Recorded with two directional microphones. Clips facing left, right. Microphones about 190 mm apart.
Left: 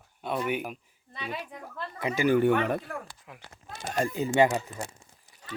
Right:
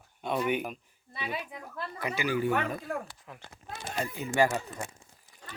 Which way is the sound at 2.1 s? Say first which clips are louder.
Left 6 dB; 55° left (ahead or behind).